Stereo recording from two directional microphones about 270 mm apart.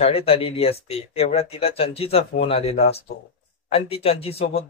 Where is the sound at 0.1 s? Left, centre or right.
Left.